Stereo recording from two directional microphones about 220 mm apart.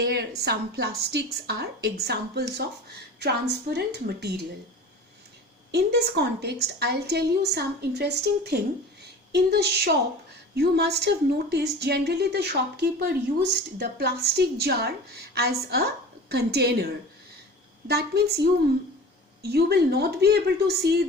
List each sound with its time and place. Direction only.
0.0 s a woman's voice: 45° right (ahead or behind)
5.7 s a woman's voice: 45° right (ahead or behind)
17.8 s a woman's voice: 45° right (ahead or behind)